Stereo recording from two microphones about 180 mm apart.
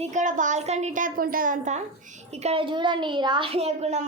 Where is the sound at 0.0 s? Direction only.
45° right (ahead or behind).